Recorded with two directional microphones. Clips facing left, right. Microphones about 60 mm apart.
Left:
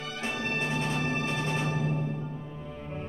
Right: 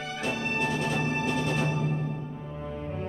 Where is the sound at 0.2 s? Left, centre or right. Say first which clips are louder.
Right 2 dB; left.